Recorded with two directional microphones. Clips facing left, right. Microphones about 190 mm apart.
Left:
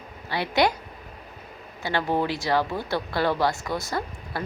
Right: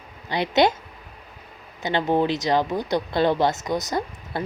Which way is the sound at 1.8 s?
20° right (ahead or behind).